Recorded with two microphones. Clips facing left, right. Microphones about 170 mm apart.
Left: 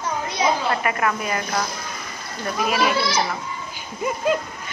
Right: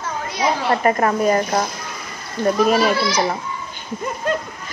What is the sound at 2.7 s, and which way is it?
Speech, 40° right (ahead or behind).